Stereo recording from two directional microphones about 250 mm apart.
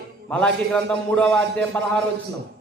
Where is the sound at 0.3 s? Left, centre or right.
Centre.